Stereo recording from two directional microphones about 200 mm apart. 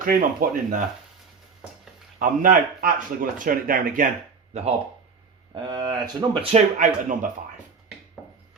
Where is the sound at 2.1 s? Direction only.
40° right (ahead or behind).